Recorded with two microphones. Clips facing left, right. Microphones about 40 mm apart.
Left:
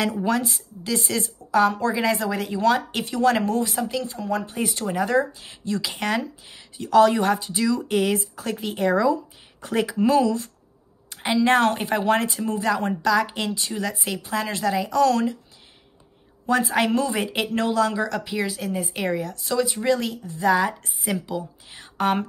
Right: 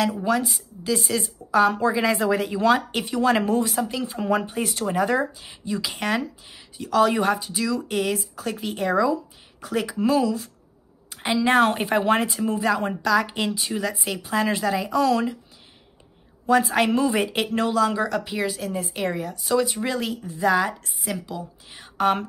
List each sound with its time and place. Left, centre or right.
0.0 s speech: centre
4.1 s speech: right
4.5 s speech: centre
16.4 s speech: centre